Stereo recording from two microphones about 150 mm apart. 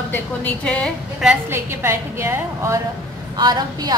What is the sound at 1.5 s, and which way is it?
A woman's voice, 15° right (ahead or behind).